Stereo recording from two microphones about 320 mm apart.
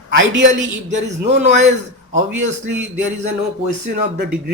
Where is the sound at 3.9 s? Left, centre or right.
Right.